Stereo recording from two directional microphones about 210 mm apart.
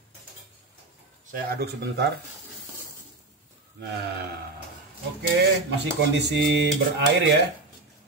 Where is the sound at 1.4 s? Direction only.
50° right (ahead or behind).